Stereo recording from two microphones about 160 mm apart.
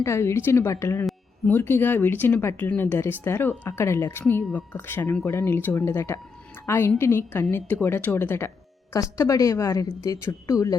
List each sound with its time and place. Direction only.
0.0 s speech: 15° left (ahead or behind)